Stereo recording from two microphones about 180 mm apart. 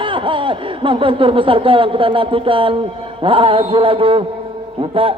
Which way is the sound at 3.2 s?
30° right (ahead or behind).